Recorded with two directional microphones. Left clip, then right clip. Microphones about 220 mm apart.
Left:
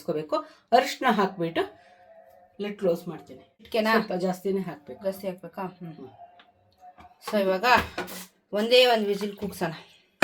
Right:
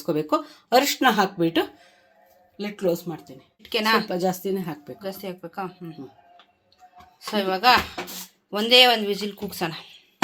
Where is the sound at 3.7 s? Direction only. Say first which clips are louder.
Right 2 dB; 5° right (ahead or behind).